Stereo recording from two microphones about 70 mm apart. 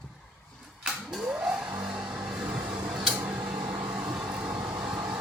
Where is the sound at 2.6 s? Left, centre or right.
Right.